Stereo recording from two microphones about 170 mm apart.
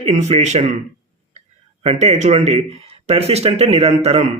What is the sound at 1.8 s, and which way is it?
Speech, 40° right (ahead or behind).